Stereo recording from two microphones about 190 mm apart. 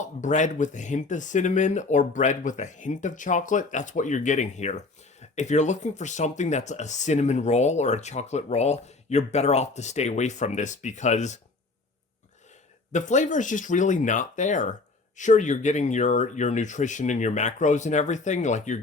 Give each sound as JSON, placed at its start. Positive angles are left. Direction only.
{"t": 0.0, "sound": "speech", "side_deg": 40}
{"t": 12.9, "sound": "speech", "side_deg": 40}